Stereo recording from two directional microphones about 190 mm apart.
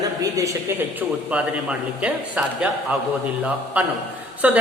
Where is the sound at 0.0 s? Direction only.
20° right (ahead or behind).